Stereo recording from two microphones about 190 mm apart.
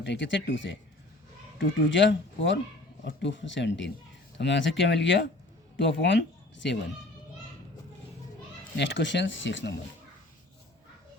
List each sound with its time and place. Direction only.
0.0 s speech: 70° left (ahead or behind)
1.9 s speech: 75° left (ahead or behind)
8.7 s speech: 70° left (ahead or behind)